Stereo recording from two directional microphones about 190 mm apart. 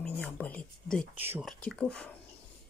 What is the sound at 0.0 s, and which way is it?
Speech, 10° left (ahead or behind).